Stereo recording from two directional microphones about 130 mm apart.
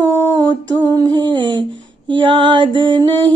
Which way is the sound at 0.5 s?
30° right (ahead or behind).